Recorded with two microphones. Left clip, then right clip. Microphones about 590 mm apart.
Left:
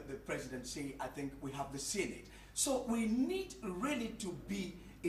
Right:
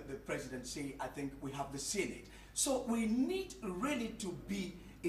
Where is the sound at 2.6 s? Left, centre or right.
Right.